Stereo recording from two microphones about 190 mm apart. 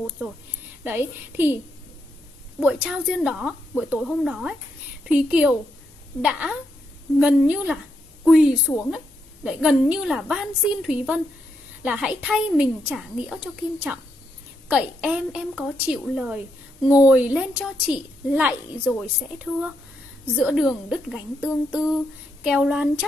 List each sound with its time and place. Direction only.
0.8 s a woman's voice: 10° right (ahead or behind)
2.6 s a woman's voice: 5° right (ahead or behind)
7.2 s a woman's voice: 10° right (ahead or behind)